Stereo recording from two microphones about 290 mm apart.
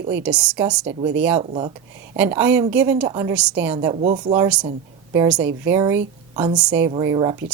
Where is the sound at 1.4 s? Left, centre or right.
Centre.